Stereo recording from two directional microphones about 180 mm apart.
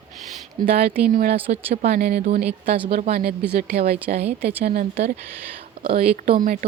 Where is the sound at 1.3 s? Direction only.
35° right (ahead or behind).